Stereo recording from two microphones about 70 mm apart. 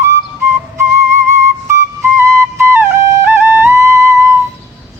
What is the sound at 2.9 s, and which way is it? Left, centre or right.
Music, right.